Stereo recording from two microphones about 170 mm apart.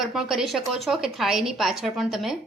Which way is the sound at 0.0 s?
Centre (ahead or behind).